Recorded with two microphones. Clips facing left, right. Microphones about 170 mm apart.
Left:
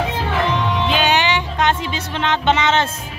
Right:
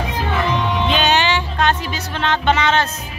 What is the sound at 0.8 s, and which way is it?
Music, 10° left (ahead or behind).